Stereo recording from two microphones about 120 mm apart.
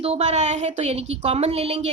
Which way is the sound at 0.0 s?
65° right (ahead or behind).